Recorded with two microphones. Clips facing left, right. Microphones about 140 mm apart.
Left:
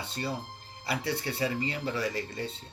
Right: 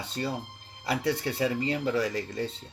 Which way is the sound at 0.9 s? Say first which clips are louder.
Right 4 dB; 45° right (ahead or behind).